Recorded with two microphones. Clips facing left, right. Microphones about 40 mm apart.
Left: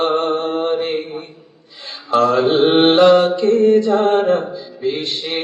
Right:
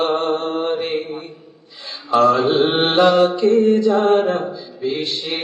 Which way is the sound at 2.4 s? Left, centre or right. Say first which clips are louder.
Left 2 dB; left.